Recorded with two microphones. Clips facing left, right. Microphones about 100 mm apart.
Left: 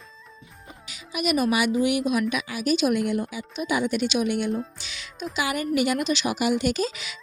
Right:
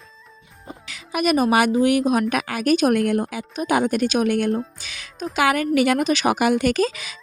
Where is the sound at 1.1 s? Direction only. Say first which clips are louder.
Right 5 dB; 50° right (ahead or behind).